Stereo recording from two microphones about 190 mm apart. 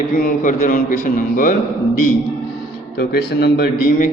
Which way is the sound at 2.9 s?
60° left (ahead or behind).